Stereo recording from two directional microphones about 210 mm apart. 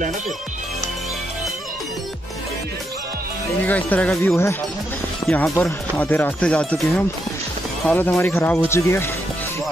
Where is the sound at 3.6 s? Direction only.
10° left (ahead or behind).